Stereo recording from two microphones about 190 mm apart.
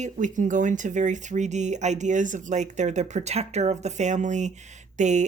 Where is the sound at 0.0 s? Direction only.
40° right (ahead or behind).